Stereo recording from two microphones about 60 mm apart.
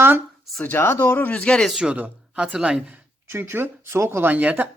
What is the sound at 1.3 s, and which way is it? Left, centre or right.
Speech, left.